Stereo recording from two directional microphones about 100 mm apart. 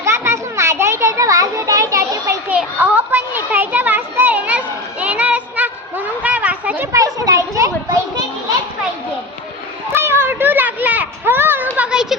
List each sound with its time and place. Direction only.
0.0 s children playing: 25° right (ahead or behind)
2.5 s children playing: 15° right (ahead or behind)
6.9 s children playing: 35° right (ahead or behind)
9.9 s a sound: 25° right (ahead or behind); by 12.1 s 10° right (ahead or behind)